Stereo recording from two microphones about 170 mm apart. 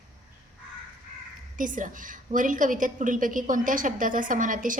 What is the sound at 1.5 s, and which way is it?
A woman's voice, 50° right (ahead or behind).